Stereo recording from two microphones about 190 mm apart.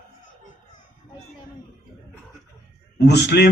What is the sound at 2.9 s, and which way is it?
Speech, 60° left (ahead or behind).